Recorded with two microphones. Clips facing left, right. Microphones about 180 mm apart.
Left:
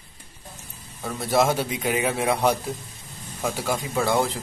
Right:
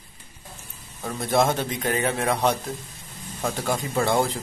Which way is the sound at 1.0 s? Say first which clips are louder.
Even; centre (ahead or behind).